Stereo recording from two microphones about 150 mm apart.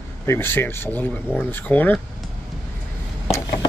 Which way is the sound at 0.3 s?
15° left (ahead or behind).